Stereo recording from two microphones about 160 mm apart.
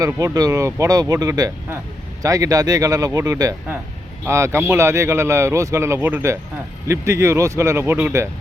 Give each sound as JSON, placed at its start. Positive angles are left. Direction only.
{"t": 0.3, "sound": "speech", "side_deg": -20}